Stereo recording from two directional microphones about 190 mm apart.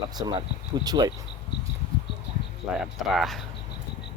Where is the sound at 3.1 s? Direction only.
Centre (ahead or behind).